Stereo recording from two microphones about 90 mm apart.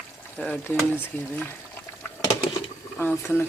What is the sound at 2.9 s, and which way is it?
Speech, 25° left (ahead or behind).